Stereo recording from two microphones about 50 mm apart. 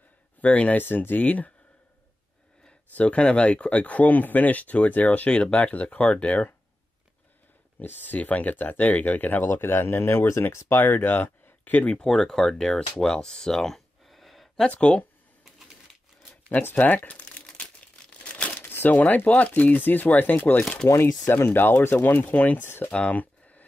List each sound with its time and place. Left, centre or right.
0.4 s speech: left
0.7 s speech: left
2.9 s speech: left
7.8 s speech: left
9.5 s speech: left
10.8 s speech: left
12.0 s speech: centre
13.0 s a sound: centre
14.7 s speech: left
16.7 s crumpling: left
18.5 s speech: left
22.3 s speech: left
22.6 s speech: left
22.8 s a sound: left